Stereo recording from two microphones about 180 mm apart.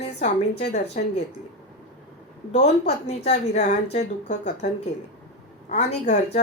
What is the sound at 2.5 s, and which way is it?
A woman's voice, 35° left (ahead or behind).